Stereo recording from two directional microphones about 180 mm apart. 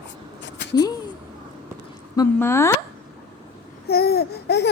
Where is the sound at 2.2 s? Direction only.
15° left (ahead or behind).